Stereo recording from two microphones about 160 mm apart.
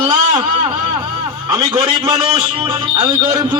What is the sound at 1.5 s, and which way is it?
Speech, 25° right (ahead or behind).